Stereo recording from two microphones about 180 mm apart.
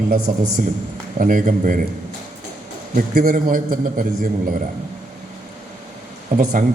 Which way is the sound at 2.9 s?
45° right (ahead or behind).